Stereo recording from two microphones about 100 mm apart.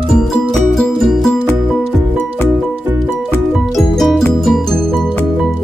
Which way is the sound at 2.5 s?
20° right (ahead or behind).